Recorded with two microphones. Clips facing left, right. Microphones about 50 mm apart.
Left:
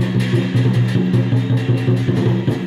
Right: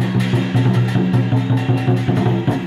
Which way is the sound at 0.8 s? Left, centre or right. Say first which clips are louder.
Even; centre.